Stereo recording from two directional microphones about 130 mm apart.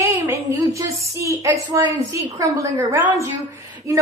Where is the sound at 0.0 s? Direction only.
25° right (ahead or behind).